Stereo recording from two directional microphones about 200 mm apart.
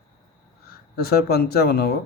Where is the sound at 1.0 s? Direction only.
50° left (ahead or behind).